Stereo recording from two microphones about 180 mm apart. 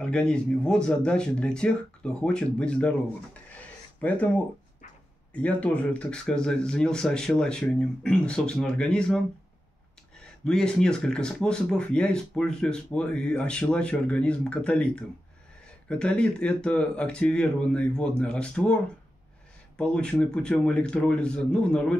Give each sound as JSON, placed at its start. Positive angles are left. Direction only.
{"t": 0.0, "sound": "speech", "side_deg": 5}
{"t": 4.0, "sound": "speech", "side_deg": 10}
{"t": 19.8, "sound": "speech", "side_deg": 5}